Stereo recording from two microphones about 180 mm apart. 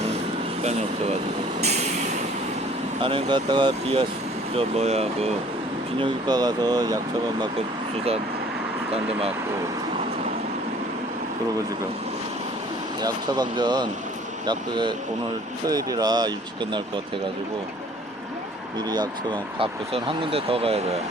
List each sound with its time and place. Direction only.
1.6 s vehicle: 40° right (ahead or behind)
3.0 s speech: 30° right (ahead or behind)
6.0 s speech: 25° right (ahead or behind)
8.9 s speech: 35° right (ahead or behind)
13.0 s speech: 25° right (ahead or behind)
18.9 s speech: 25° right (ahead or behind)